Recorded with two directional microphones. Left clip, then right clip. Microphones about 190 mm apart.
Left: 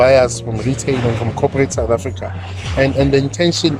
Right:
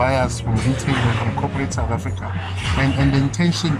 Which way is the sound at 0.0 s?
55° left (ahead or behind).